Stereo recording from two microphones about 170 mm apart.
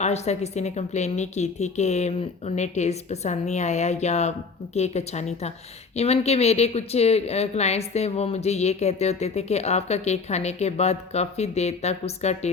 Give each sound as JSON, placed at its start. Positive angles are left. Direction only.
{"t": 0.0, "sound": "speech", "side_deg": 40}